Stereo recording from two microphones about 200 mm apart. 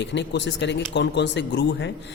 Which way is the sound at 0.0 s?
60° left (ahead or behind).